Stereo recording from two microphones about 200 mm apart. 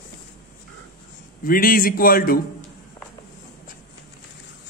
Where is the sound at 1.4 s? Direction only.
45° left (ahead or behind).